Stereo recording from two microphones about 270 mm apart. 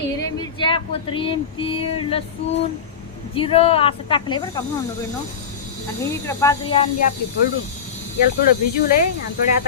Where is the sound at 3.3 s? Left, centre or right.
Left.